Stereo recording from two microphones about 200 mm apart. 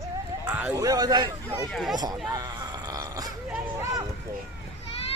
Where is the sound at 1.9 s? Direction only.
20° right (ahead or behind).